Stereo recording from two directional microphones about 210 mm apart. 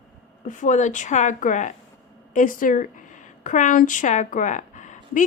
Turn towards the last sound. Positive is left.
turn(degrees=35)  # may be behind; listen again after turning